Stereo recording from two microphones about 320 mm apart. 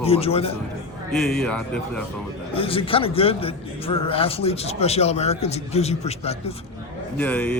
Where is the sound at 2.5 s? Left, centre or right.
Centre.